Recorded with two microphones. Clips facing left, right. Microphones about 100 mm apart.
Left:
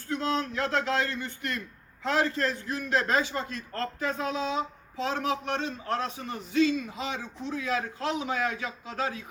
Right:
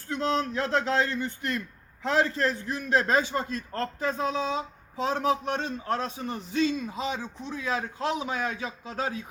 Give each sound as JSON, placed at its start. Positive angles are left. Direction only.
{"t": 0.2, "sound": "a man's voice", "side_deg": -30}